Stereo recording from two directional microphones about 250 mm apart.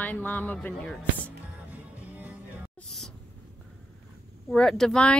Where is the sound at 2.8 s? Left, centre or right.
Centre.